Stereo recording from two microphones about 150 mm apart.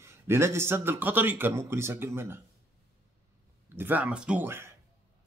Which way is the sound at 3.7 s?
15° right (ahead or behind).